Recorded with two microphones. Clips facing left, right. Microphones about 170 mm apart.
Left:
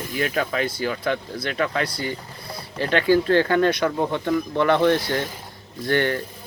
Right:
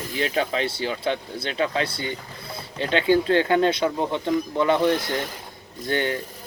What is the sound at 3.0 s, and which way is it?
Speech, 20° right (ahead or behind).